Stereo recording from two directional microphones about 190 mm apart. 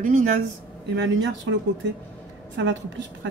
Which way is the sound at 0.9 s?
75° right (ahead or behind).